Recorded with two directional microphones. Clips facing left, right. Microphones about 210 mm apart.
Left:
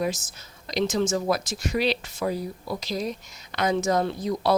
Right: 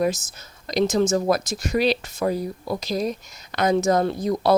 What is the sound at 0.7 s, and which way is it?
Speech, 45° right (ahead or behind).